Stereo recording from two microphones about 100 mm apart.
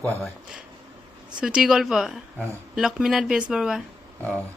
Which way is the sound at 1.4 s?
10° right (ahead or behind).